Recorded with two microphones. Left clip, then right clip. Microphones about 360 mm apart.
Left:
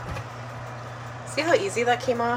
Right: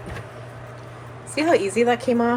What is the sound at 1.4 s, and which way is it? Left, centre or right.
Speech, right.